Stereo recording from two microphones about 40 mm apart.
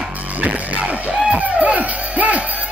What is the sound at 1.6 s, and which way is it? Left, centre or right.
Music, right.